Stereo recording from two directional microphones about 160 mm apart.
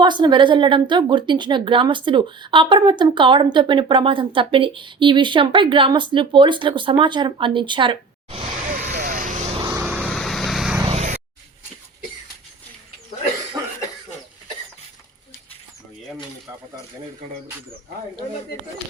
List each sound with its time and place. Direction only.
0.0 s a woman's voice: 30° right (ahead or behind)
8.7 s vehicle: 55° right (ahead or behind)
9.6 s vehicle: 10° right (ahead or behind)
10.0 s vehicle: centre (ahead or behind)
10.8 s a sound: 45° right (ahead or behind)